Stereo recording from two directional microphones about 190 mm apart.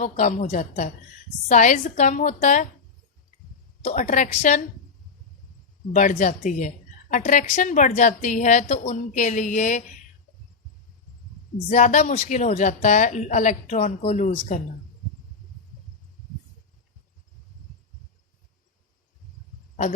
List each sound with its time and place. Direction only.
0.0 s a woman's voice: 40° left (ahead or behind)
3.8 s a woman's voice: 40° left (ahead or behind)
5.9 s a woman's voice: 40° left (ahead or behind)
11.5 s a woman's voice: 40° left (ahead or behind)